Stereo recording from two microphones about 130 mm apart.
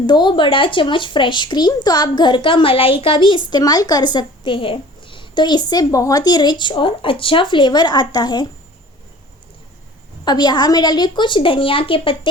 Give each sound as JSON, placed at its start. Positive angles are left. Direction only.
{"t": 0.0, "sound": "speech", "side_deg": 35}
{"t": 10.2, "sound": "speech", "side_deg": 35}